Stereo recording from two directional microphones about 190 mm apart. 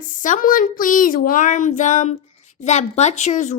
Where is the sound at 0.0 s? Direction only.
40° left (ahead or behind).